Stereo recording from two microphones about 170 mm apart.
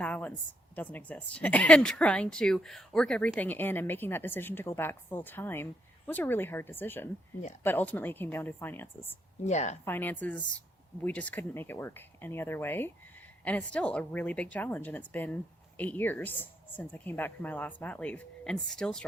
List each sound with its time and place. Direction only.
0.0 s a sound: 10° left (ahead or behind)
0.8 s speech: 10° left (ahead or behind)
9.4 s a woman's voice: 45° left (ahead or behind)
9.8 s speech: 10° left (ahead or behind)